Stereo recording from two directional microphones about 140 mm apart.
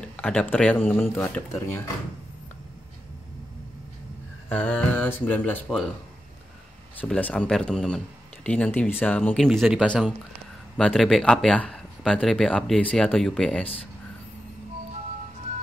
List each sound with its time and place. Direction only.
0.0 s speech: 10° left (ahead or behind)
4.5 s speech: 10° left (ahead or behind)
7.0 s speech: 10° left (ahead or behind)
9.5 s speech: 5° right (ahead or behind)